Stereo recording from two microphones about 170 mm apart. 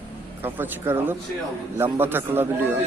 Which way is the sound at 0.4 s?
10° right (ahead or behind).